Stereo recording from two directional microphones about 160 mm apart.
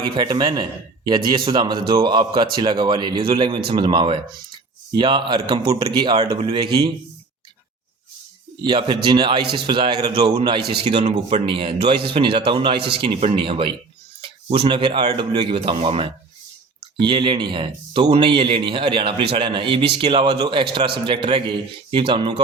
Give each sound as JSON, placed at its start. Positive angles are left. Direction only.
{"t": 0.0, "sound": "speech", "side_deg": -30}
{"t": 8.6, "sound": "speech", "side_deg": -30}